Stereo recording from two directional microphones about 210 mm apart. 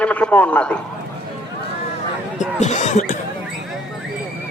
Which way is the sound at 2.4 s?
35° left (ahead or behind).